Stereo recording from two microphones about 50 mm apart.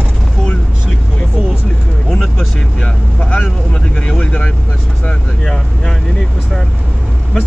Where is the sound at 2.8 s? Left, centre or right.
Left.